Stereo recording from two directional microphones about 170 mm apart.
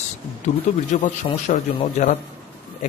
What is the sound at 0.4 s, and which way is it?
A man's voice, 45° left (ahead or behind).